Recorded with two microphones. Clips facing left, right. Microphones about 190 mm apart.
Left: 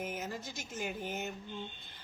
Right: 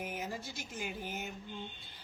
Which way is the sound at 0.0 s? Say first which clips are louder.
Left 1 dB; 50° left (ahead or behind).